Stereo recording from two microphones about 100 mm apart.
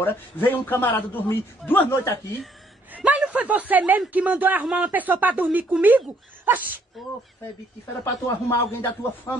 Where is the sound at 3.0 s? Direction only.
15° right (ahead or behind).